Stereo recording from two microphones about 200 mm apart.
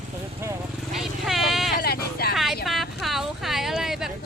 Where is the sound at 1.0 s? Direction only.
Centre (ahead or behind).